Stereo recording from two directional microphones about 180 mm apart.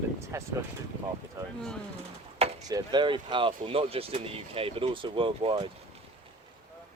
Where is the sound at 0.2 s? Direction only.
15° right (ahead or behind).